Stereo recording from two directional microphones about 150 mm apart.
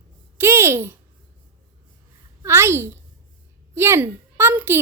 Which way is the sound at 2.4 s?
15° right (ahead or behind).